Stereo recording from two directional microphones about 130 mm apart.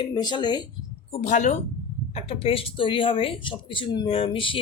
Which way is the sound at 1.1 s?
60° left (ahead or behind).